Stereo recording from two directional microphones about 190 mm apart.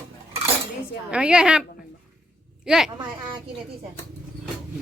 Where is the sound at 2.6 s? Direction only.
Centre (ahead or behind).